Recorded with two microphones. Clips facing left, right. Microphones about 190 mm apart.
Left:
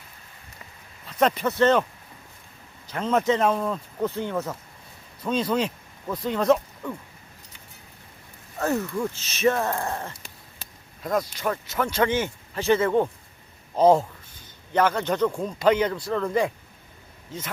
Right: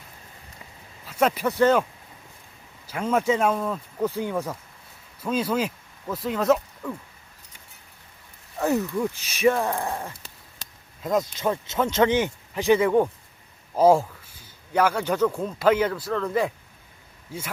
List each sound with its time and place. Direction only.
1.0 s speech: 5° right (ahead or behind)
2.8 s speech: 10° right (ahead or behind)
8.5 s speech: 15° right (ahead or behind)
11.0 s a man's voice: 20° right (ahead or behind); by 16.5 s centre (ahead or behind)
17.3 s speech: 10° right (ahead or behind)